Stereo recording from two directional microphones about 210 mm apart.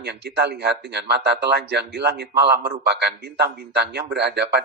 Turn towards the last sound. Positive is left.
turn(degrees=-50)  # may be behind; listen again after turning